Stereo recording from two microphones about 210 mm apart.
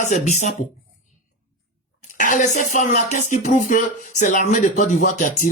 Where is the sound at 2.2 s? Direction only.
35° left (ahead or behind).